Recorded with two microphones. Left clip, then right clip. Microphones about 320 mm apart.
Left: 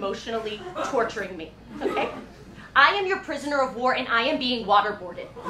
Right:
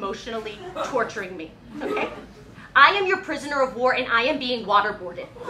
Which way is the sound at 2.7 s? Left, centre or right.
Right.